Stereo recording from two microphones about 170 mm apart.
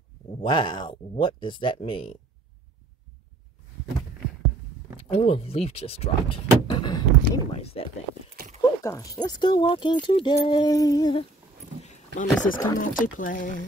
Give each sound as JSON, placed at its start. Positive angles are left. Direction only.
{"t": 0.4, "sound": "speech", "side_deg": 30}
{"t": 5.1, "sound": "speech", "side_deg": 35}
{"t": 8.5, "sound": "speech", "side_deg": 20}
{"t": 11.8, "sound": "wild animals", "side_deg": 45}
{"t": 12.7, "sound": "speech", "side_deg": 50}